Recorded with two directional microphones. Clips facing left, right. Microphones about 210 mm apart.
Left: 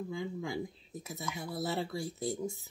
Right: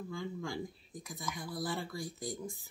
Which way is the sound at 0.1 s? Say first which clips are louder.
Even; 20° left (ahead or behind).